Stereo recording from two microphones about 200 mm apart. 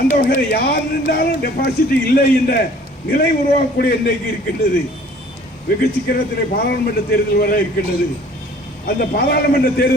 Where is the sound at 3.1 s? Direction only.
45° left (ahead or behind).